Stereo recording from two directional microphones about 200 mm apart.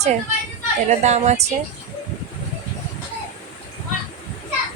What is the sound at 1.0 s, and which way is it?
Speech, 35° right (ahead or behind).